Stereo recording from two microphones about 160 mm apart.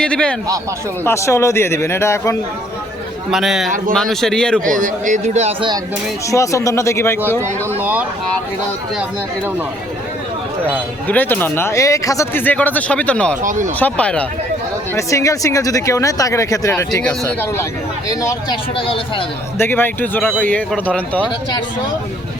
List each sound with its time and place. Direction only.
0.0 s a man's voice: 5° left (ahead or behind)
1.0 s speech: 15° left (ahead or behind)
3.3 s a man's voice: centre (ahead or behind)
4.6 s a man's voice: 55° right (ahead or behind)
6.3 s speech: 20° left (ahead or behind)
7.8 s speech: 10° right (ahead or behind)
11.1 s speech: 10° left (ahead or behind)
13.4 s speech: 55° right (ahead or behind)
13.7 s speech: 10° left (ahead or behind)
14.9 s speech: 20° left (ahead or behind)
18.8 s speech: 35° left (ahead or behind)
19.5 s speech: 15° left (ahead or behind)